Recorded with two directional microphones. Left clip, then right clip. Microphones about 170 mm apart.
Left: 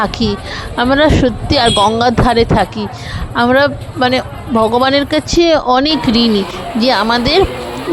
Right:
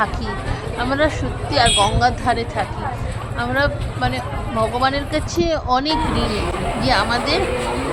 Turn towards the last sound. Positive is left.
turn(degrees=50)  # may be behind; listen again after turning